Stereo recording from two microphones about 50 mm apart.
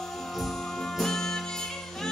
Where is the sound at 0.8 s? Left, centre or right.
Centre.